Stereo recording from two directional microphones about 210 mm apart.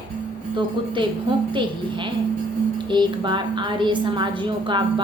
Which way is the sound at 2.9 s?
20° right (ahead or behind).